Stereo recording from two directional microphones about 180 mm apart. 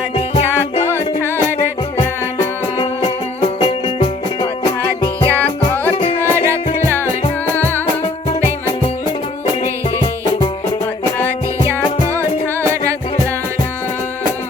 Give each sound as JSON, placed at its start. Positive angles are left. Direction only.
{"t": 3.6, "sound": "music", "side_deg": 30}
{"t": 6.1, "sound": "music", "side_deg": -15}
{"t": 7.5, "sound": "music", "side_deg": 10}